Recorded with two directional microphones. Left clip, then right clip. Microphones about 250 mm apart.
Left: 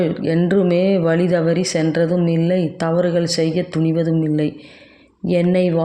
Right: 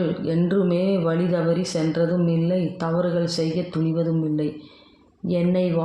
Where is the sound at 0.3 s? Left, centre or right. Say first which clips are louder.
Left 6 dB; left.